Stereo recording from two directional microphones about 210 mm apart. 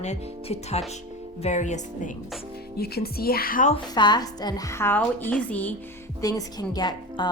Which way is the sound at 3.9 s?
20° left (ahead or behind).